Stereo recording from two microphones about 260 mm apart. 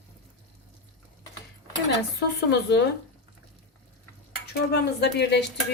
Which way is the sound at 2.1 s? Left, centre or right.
Left.